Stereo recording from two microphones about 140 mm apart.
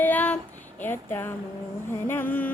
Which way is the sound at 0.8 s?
15° left (ahead or behind).